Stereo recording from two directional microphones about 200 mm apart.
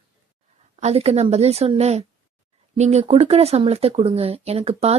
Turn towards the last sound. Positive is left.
turn(degrees=-30)  # may be behind; listen again after turning